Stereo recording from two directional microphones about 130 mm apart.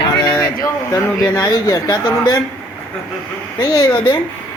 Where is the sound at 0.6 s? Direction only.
25° left (ahead or behind).